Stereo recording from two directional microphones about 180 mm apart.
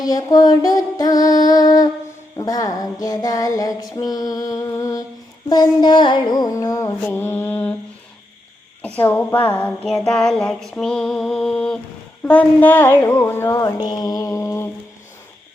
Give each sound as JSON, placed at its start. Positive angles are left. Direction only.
{"t": 0.0, "sound": "music", "side_deg": 20}
{"t": 5.5, "sound": "mantra", "side_deg": 25}
{"t": 9.0, "sound": "a sound", "side_deg": 10}
{"t": 12.2, "sound": "mantra", "side_deg": 10}